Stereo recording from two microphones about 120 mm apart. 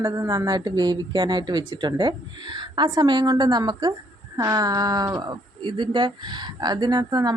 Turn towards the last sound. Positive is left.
turn(degrees=-35)  # may be behind; listen again after turning